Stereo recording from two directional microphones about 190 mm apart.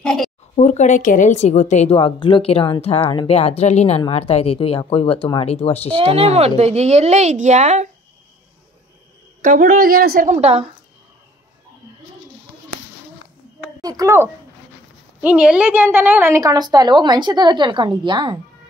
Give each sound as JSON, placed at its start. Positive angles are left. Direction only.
{"t": 0.0, "sound": "a woman's voice", "side_deg": 5}
{"t": 0.6, "sound": "a woman's voice", "side_deg": 40}
{"t": 5.9, "sound": "a woman's voice", "side_deg": -30}
{"t": 9.4, "sound": "a woman's voice", "side_deg": -45}
{"t": 13.7, "sound": "a woman's voice", "side_deg": -20}